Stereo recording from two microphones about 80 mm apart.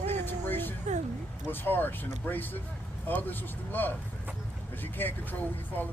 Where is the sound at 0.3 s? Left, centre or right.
Left.